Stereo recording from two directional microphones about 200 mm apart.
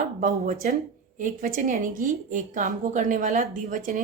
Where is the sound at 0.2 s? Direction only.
40° right (ahead or behind).